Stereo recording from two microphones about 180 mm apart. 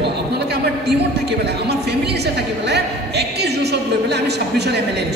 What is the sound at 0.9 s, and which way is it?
A woman's voice, 65° right (ahead or behind).